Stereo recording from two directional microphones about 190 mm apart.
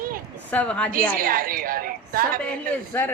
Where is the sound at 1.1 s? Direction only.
50° right (ahead or behind).